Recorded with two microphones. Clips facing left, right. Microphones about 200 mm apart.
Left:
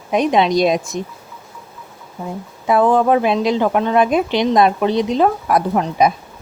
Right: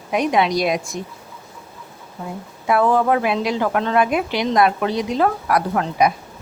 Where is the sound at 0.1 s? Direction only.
25° left (ahead or behind).